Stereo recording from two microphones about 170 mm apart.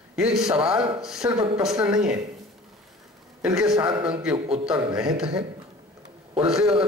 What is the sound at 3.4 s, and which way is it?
Speech, 5° right (ahead or behind).